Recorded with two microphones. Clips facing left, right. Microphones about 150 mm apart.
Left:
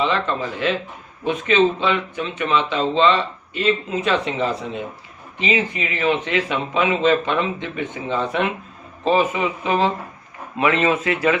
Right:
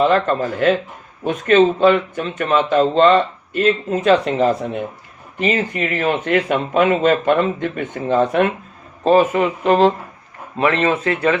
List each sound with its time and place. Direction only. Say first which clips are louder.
0.0 s speech: right 6 dB; 50° right (ahead or behind)
4.6 s speech: right 4 dB; 55° right (ahead or behind)
10.9 s speech: right 2 dB; 30° right (ahead or behind)